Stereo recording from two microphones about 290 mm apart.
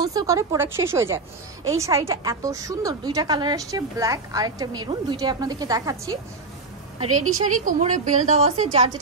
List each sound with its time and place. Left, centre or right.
0.0 s a woman's voice: centre
7.6 s a woman's voice: right